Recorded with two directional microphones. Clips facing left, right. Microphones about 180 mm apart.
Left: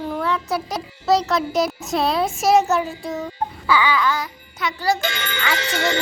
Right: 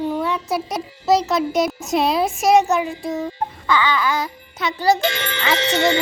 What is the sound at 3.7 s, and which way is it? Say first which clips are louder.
Babbling: even; 10° left (ahead or behind).